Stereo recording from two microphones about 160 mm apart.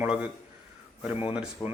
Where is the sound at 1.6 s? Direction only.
15° left (ahead or behind).